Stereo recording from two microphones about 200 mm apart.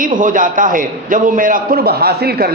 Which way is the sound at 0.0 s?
40° right (ahead or behind).